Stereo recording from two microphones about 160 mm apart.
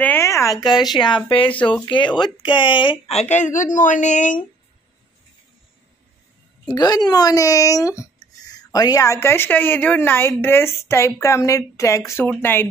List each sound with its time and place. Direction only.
0.0 s speech: 15° left (ahead or behind); by 3.2 s 30° left (ahead or behind)
3.2 s speech: 45° left (ahead or behind)
6.7 s speech: 25° left (ahead or behind)